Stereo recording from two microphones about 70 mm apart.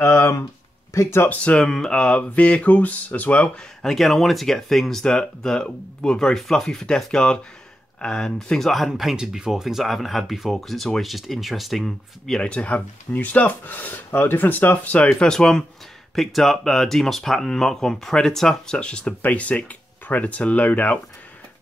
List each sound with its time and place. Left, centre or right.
0.0 s speech: left
1.3 s speech: centre
3.5 s speech: centre
12.4 s speech: centre